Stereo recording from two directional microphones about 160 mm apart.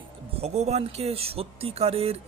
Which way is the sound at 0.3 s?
40° right (ahead or behind).